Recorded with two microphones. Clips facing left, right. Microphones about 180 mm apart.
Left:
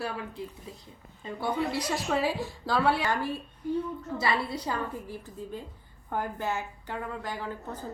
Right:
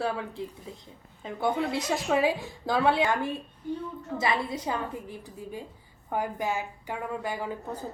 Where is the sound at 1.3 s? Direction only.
20° right (ahead or behind).